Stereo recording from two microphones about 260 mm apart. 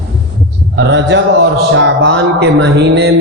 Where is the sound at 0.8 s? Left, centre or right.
Right.